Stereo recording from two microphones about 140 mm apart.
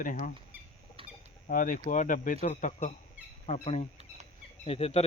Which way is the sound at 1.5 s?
80° left.